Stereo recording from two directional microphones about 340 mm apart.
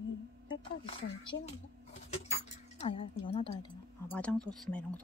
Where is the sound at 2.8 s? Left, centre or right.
Centre.